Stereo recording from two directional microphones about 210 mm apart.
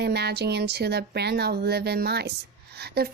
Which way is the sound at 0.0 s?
50° right (ahead or behind).